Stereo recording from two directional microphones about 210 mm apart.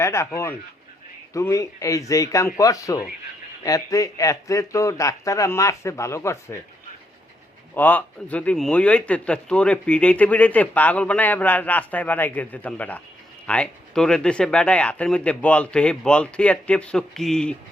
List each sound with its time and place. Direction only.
0.0 s a man's voice: 15° left (ahead or behind)
7.8 s a man's voice: 10° left (ahead or behind)